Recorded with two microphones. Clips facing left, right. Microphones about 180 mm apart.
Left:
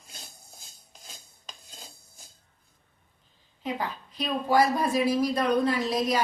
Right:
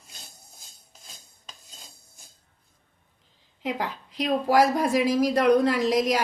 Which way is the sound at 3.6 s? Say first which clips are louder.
Right 2 dB; 90° right.